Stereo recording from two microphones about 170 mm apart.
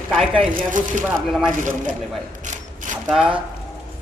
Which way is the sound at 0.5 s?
50° right (ahead or behind).